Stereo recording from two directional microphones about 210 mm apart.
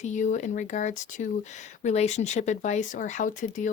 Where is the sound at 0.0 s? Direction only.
35° left (ahead or behind).